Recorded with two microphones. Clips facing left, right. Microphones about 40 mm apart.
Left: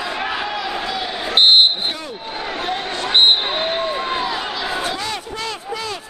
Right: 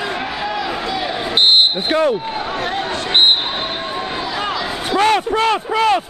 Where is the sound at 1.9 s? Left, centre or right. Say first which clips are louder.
Right 12 dB; right.